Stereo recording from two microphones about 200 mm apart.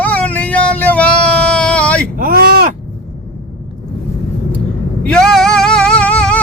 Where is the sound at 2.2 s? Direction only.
45° right (ahead or behind).